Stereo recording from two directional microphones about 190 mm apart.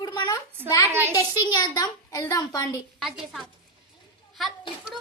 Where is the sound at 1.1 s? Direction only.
20° left (ahead or behind).